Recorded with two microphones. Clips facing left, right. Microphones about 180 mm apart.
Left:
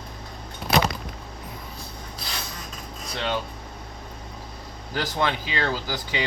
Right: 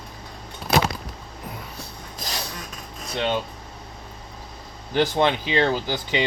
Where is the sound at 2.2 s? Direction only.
45° right (ahead or behind).